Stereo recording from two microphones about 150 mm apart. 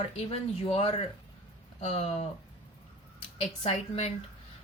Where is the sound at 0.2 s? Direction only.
40° left (ahead or behind).